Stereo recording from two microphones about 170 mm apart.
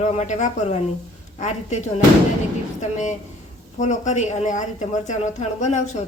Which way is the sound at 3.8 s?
45° left (ahead or behind).